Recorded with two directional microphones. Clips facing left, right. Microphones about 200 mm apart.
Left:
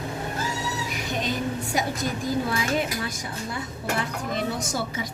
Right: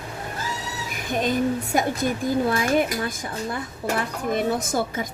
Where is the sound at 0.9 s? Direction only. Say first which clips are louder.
Right 8 dB; 50° right (ahead or behind).